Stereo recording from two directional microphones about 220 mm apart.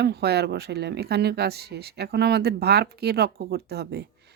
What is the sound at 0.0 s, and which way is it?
Speech, 50° right (ahead or behind).